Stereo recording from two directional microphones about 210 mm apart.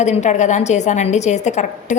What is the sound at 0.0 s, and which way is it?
A woman's voice, 35° left (ahead or behind).